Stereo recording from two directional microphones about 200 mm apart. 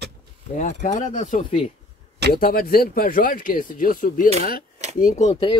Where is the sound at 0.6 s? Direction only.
40° left (ahead or behind).